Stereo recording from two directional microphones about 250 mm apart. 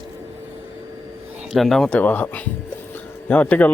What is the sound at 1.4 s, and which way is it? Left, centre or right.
Speech, centre.